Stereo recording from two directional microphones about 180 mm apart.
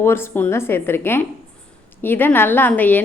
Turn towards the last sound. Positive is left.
turn(degrees=10)  # may be behind; listen again after turning